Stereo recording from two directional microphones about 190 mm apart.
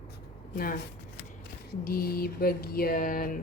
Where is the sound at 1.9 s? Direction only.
50° left (ahead or behind).